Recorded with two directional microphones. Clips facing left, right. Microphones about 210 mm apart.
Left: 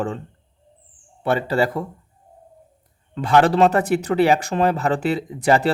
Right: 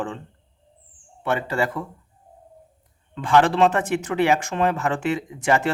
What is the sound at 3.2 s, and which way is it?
Speech, 40° left (ahead or behind).